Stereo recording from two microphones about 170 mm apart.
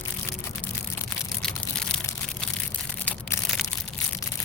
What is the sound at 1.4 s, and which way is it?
Crushing, 5° left (ahead or behind).